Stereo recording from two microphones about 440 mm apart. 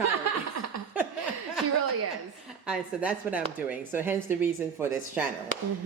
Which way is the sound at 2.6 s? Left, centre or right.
Centre.